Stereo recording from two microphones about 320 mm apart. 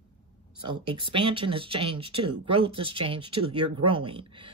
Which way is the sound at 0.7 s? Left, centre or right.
Centre.